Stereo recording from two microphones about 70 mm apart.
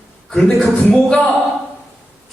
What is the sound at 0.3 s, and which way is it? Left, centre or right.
A man's voice, centre.